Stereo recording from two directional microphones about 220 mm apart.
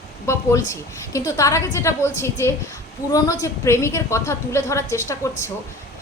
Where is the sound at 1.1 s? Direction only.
15° left (ahead or behind).